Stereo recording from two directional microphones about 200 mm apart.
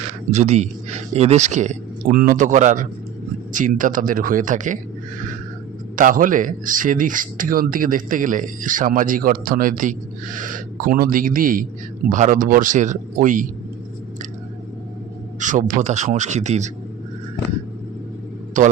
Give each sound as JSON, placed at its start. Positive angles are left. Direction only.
{"t": 0.3, "sound": "speech", "side_deg": -35}
{"t": 6.0, "sound": "speech", "side_deg": -40}
{"t": 15.4, "sound": "speech", "side_deg": -40}
{"t": 18.5, "sound": "speech", "side_deg": -40}